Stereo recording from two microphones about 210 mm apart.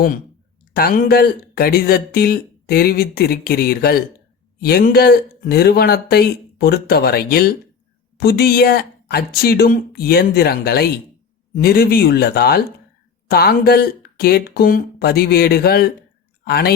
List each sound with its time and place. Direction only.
0.8 s speech: 45° left (ahead or behind)